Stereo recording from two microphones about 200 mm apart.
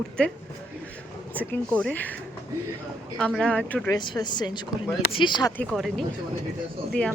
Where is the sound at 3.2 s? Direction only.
5° left (ahead or behind).